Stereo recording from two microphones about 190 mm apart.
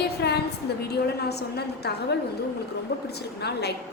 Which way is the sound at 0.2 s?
60° left (ahead or behind).